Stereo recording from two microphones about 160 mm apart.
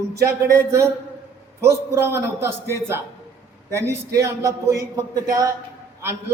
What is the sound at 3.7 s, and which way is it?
A man's voice, 15° right (ahead or behind).